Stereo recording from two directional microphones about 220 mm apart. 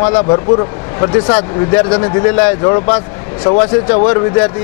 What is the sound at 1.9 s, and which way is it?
A man's voice, 20° left (ahead or behind).